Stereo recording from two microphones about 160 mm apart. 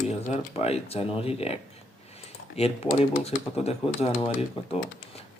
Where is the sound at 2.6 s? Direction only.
40° left (ahead or behind).